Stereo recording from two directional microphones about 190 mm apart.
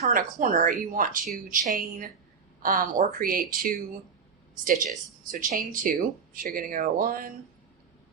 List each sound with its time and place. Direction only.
0.0 s speech: 45° right (ahead or behind)